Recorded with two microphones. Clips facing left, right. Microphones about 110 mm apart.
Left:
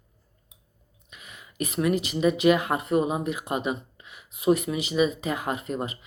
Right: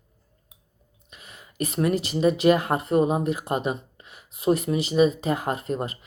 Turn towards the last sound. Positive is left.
turn(degrees=-40)  # may be behind; listen again after turning